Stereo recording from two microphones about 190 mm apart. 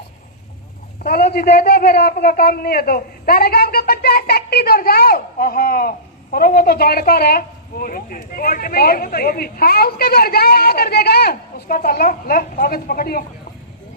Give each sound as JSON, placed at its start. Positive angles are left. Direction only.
{"t": 1.0, "sound": "a woman's voice", "side_deg": 55}